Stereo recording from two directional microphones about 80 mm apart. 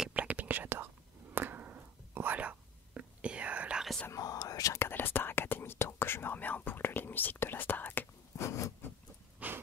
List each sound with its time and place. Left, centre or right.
0.1 s whispering: centre
4.1 s whispering: left
4.8 s whispering: left
8.4 s a sound: left
9.4 s wheeze: centre